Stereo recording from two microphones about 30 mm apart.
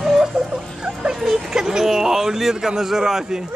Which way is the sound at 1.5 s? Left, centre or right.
Right.